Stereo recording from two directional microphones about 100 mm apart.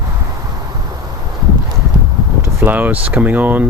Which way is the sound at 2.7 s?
15° right (ahead or behind).